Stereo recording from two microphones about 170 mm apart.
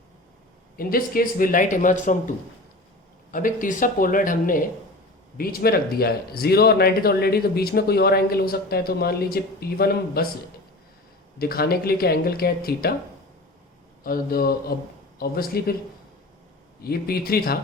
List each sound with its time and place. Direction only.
0.8 s speech: 60° left (ahead or behind)
3.3 s speech: 50° left (ahead or behind)
11.3 s speech: 65° left (ahead or behind)
14.0 s speech: 60° left (ahead or behind)
16.8 s speech: 65° left (ahead or behind)